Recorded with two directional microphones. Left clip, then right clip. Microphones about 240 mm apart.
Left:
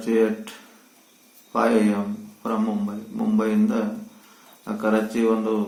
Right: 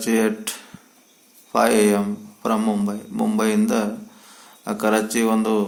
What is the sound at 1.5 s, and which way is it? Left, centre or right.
A man's voice, right.